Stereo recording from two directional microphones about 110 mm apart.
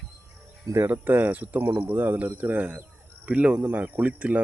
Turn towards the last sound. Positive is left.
turn(degrees=-15)  # may be behind; listen again after turning